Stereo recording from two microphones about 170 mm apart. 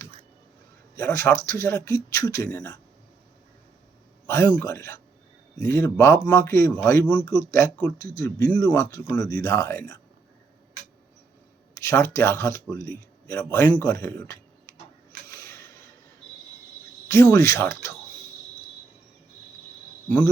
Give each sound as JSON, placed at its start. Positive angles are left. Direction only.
{"t": 0.9, "sound": "speech", "side_deg": 15}
{"t": 4.3, "sound": "speech", "side_deg": 15}
{"t": 11.8, "sound": "speech", "side_deg": 15}
{"t": 15.3, "sound": "a sound", "side_deg": 20}
{"t": 17.1, "sound": "speech", "side_deg": 15}